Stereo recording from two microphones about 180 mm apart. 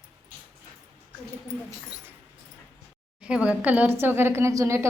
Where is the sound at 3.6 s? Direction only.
10° right (ahead or behind).